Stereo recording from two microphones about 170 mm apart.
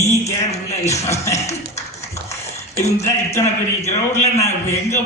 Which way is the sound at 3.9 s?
15° left (ahead or behind).